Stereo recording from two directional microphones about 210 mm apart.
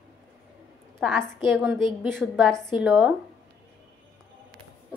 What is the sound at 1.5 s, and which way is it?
Speech, 10° right (ahead or behind).